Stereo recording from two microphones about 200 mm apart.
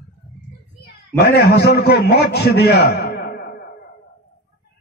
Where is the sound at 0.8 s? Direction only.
55° left (ahead or behind).